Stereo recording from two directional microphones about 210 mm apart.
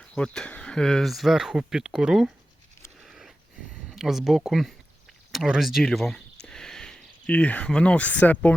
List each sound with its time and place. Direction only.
0.0 s speech: 5° left (ahead or behind)
3.0 s sniff: centre (ahead or behind)
3.8 s speech: centre (ahead or behind)